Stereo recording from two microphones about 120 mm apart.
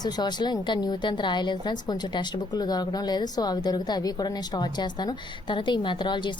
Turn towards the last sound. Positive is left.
turn(degrees=40)  # may be behind; listen again after turning